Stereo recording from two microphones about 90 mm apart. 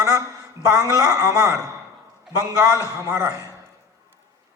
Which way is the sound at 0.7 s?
40° right (ahead or behind).